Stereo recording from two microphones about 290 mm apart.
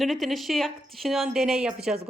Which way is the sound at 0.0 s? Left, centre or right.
Centre.